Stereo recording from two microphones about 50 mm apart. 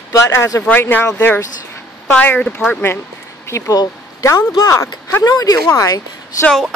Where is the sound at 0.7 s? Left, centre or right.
Left.